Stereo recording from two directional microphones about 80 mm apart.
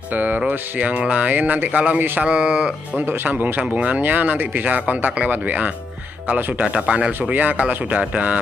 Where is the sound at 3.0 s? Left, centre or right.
Right.